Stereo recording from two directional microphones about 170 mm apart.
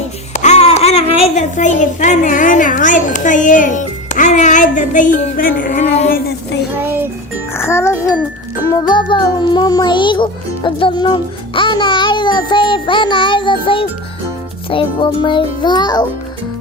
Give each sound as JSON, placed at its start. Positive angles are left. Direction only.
{"t": 0.3, "sound": "a child's voice", "side_deg": 40}
{"t": 6.8, "sound": "speech", "side_deg": -15}
{"t": 7.5, "sound": "speech", "side_deg": 15}
{"t": 8.7, "sound": "music", "side_deg": 25}